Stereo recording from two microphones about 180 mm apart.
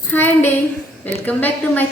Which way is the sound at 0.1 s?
10° left (ahead or behind).